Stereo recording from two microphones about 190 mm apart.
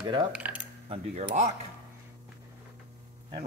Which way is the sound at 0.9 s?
35° right (ahead or behind).